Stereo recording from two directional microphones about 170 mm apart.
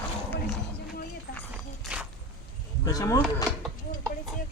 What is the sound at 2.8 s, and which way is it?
Speech, 20° left (ahead or behind).